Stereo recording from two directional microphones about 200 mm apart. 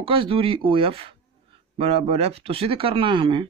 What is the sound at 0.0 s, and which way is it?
Speech, 25° right (ahead or behind).